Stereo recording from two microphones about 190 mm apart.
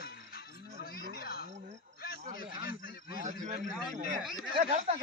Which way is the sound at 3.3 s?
40° right (ahead or behind).